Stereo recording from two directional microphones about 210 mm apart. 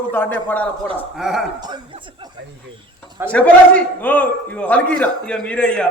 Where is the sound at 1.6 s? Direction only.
20° right (ahead or behind).